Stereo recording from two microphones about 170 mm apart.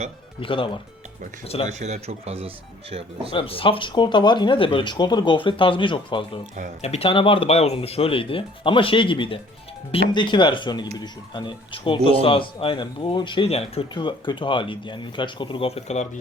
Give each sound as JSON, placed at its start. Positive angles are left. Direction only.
{"t": 0.3, "sound": "speech", "side_deg": 30}
{"t": 1.8, "sound": "a man's voice", "side_deg": -40}
{"t": 3.3, "sound": "speech", "side_deg": 30}